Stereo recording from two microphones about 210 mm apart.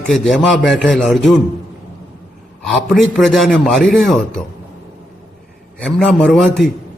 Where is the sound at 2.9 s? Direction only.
Centre (ahead or behind).